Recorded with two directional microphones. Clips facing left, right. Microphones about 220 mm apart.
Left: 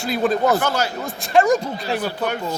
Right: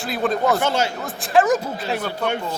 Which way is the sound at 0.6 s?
25° right (ahead or behind).